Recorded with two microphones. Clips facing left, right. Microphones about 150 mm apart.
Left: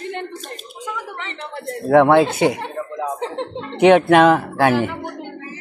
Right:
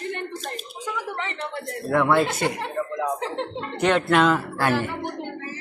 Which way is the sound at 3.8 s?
60° left (ahead or behind).